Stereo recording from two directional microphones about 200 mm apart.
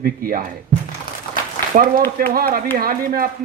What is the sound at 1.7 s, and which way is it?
A man's voice, 40° right (ahead or behind).